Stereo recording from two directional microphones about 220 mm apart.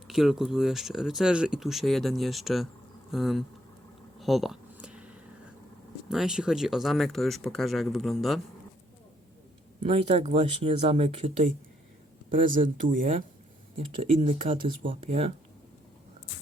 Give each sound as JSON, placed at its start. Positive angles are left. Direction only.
{"t": 0.1, "sound": "speech", "side_deg": 0}
{"t": 4.2, "sound": "a sound", "side_deg": 0}
{"t": 6.1, "sound": "speech", "side_deg": -5}
{"t": 9.8, "sound": "speech", "side_deg": -30}
{"t": 12.5, "sound": "speech", "side_deg": -40}
{"t": 13.7, "sound": "speech", "side_deg": -25}